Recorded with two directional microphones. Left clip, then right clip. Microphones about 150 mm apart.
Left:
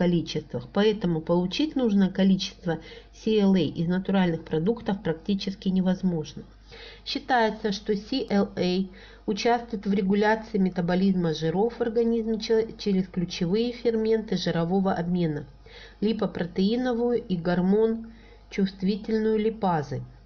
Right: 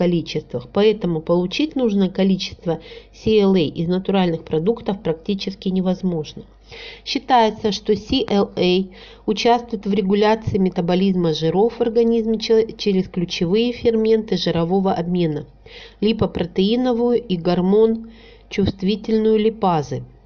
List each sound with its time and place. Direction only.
0.0 s a woman's voice: 10° right (ahead or behind)